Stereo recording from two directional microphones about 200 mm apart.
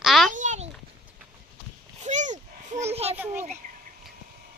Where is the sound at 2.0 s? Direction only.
35° right (ahead or behind).